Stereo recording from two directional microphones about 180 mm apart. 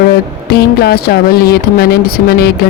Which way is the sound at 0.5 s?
60° left (ahead or behind).